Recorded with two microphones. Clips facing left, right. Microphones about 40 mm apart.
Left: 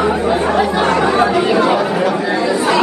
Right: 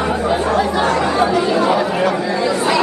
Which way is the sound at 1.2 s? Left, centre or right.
Left.